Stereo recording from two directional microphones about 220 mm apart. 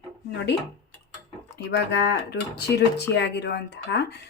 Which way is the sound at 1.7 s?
50° left (ahead or behind).